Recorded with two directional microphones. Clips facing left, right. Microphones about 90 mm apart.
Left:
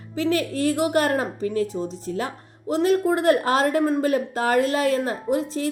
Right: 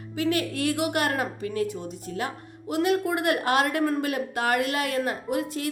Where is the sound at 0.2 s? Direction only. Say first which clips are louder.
Left 3 dB; 35° left (ahead or behind).